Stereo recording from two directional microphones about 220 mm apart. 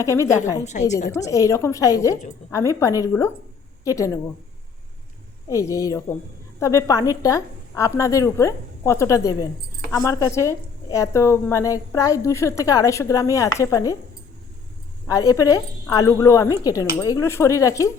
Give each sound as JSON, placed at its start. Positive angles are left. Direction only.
{"t": 0.0, "sound": "a woman's voice", "side_deg": 15}
{"t": 0.6, "sound": "a woman's voice", "side_deg": 30}
{"t": 1.1, "sound": "a woman's voice", "side_deg": 15}
{"t": 5.5, "sound": "a woman's voice", "side_deg": 15}
{"t": 15.0, "sound": "a woman's voice", "side_deg": 15}